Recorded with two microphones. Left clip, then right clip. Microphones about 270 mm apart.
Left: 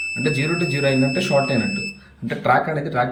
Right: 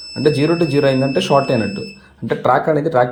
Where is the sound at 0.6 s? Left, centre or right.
Right.